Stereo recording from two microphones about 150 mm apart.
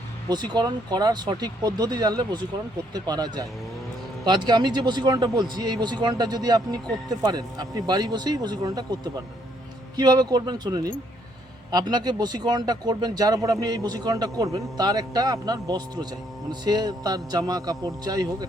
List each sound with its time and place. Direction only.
0.3 s speech: 30° right (ahead or behind)
9.9 s speech: 25° right (ahead or behind)